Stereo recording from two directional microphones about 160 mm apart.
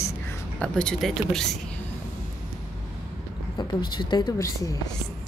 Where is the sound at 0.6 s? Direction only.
5° left (ahead or behind).